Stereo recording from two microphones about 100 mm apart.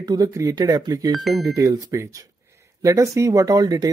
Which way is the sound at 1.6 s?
35° right (ahead or behind).